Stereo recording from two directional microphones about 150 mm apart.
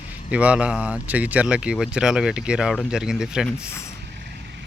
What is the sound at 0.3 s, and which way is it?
Speech, 10° right (ahead or behind).